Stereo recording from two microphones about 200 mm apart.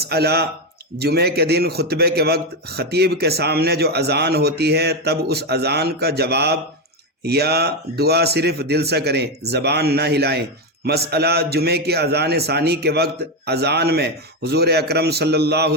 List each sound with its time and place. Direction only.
0.0 s a man's voice: 55° right (ahead or behind)